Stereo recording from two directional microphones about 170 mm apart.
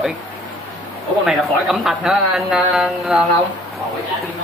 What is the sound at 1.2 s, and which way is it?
Speech, centre (ahead or behind).